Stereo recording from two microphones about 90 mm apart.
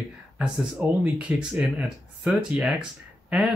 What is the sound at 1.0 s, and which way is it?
Speech, 15° right (ahead or behind).